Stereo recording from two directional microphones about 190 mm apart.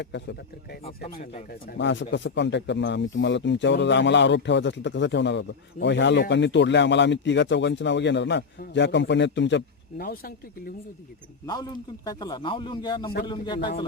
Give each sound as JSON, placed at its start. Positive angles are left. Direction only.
{"t": 0.0, "sound": "speech", "side_deg": 65}
{"t": 11.4, "sound": "a man's voice", "side_deg": 20}